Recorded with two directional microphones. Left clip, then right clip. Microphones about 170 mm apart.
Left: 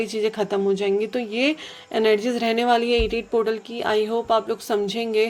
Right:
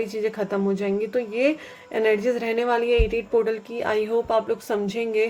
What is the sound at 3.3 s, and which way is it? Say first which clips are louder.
A woman's voice: even; 25° left (ahead or behind).